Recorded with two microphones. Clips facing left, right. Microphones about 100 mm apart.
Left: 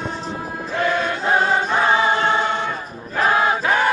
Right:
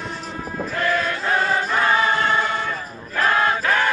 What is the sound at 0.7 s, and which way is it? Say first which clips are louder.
Choir: left 2 dB; 25° left (ahead or behind).